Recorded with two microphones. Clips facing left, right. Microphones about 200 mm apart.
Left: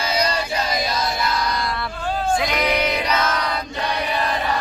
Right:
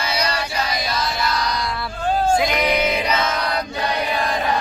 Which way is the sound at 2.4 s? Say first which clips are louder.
Right 2 dB; centre (ahead or behind).